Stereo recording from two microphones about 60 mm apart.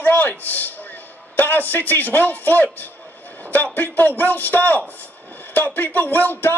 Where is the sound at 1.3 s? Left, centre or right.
Left.